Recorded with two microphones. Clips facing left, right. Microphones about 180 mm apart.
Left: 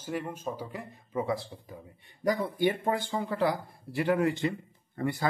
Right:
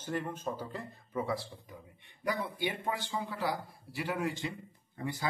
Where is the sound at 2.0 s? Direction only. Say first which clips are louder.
Left 6 dB; 40° left (ahead or behind); by 5.2 s 60° left (ahead or behind).